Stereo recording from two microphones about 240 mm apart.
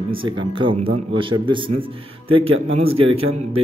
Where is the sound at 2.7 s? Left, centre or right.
Right.